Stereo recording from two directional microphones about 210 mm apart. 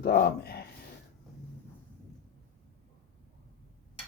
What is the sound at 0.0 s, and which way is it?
Speech, 50° left (ahead or behind).